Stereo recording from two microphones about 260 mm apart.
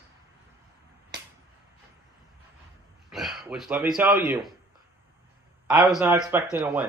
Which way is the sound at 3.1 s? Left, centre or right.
Centre.